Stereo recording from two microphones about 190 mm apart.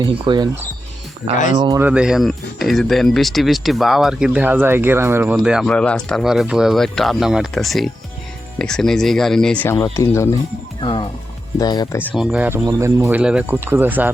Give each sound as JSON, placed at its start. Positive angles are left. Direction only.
{"t": 0.0, "sound": "speech", "side_deg": -20}
{"t": 1.5, "sound": "speech", "side_deg": -20}
{"t": 1.9, "sound": "speech", "side_deg": -5}
{"t": 10.8, "sound": "speech", "side_deg": 25}
{"t": 12.1, "sound": "speech", "side_deg": -5}